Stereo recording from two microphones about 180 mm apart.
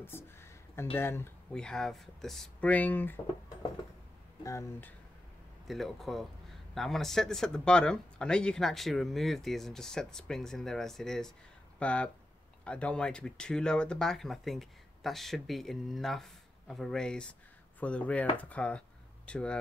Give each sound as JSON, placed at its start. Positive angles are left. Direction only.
{"t": 0.0, "sound": "a sound", "side_deg": 15}
{"t": 0.9, "sound": "speech", "side_deg": 15}
{"t": 4.4, "sound": "speech", "side_deg": 15}
{"t": 5.7, "sound": "speech", "side_deg": 0}